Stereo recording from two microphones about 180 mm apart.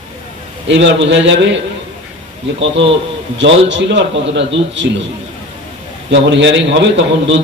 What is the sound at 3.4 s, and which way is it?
A man's voice, 90° right.